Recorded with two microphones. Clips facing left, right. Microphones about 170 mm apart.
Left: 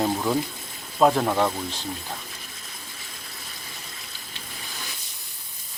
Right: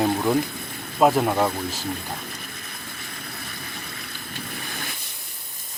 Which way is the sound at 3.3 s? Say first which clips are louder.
Right 6 dB; 60° right (ahead or behind).